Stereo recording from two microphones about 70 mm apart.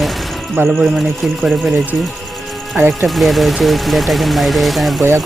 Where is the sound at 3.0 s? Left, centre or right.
Centre.